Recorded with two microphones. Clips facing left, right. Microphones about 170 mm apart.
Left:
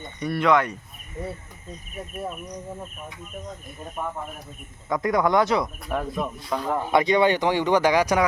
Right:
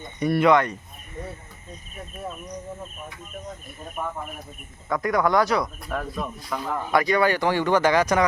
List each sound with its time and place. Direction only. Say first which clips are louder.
0.2 s speech: right 4 dB; 10° right (ahead or behind)
0.5 s speech: right 1 dB; 5° left (ahead or behind)
4.9 s speech: even; 20° left (ahead or behind)